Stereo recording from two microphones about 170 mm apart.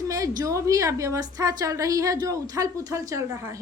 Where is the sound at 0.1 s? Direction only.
20° right (ahead or behind).